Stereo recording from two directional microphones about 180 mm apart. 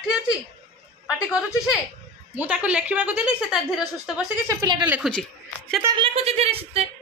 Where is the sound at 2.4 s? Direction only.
10° right (ahead or behind).